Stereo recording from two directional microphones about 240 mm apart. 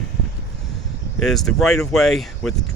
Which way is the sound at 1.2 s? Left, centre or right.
Centre.